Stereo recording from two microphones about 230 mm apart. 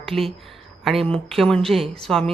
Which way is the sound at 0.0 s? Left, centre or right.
Centre.